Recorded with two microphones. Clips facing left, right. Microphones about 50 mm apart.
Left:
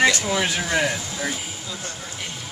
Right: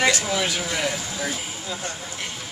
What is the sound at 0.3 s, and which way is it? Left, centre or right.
Speech, centre.